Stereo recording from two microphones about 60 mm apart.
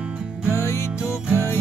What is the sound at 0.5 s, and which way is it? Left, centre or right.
Music, left.